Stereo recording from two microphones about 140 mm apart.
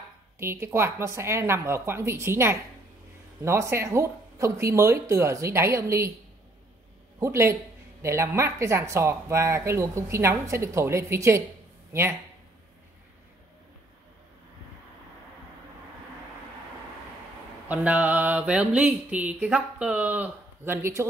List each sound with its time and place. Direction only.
0.4 s speech: 20° right (ahead or behind)
7.2 s speech: 20° right (ahead or behind)
17.6 s mantra: 10° right (ahead or behind)